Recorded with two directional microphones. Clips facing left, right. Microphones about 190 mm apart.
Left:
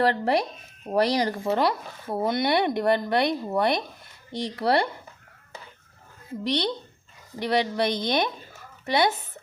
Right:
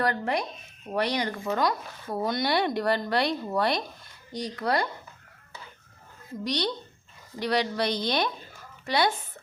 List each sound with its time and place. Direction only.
0.0 s speech: 30° left (ahead or behind)
6.4 s speech: 25° left (ahead or behind)